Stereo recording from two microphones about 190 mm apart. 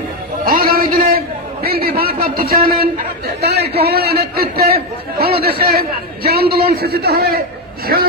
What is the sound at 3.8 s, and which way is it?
A man's voice, 55° right (ahead or behind).